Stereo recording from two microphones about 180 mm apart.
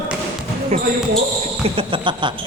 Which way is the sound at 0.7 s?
35° right (ahead or behind).